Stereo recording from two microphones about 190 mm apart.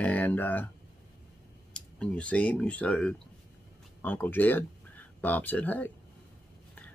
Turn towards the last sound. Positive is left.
turn(degrees=10)  # may be behind; listen again after turning